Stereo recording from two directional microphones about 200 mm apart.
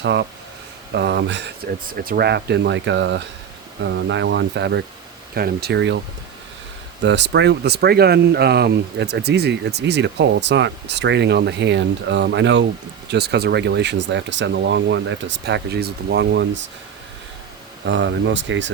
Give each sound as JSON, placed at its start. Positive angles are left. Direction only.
{"t": 0.0, "sound": "speech", "side_deg": -60}
{"t": 1.9, "sound": "speech", "side_deg": -45}
{"t": 7.0, "sound": "speech", "side_deg": -60}
{"t": 17.8, "sound": "speech", "side_deg": -65}